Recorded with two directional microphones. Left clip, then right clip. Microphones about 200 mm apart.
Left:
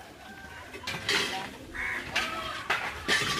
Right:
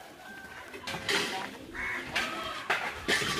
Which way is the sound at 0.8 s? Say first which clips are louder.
Left 2 dB; 45° right (ahead or behind).